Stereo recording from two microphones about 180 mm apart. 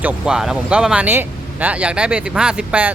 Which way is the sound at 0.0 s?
5° right (ahead or behind).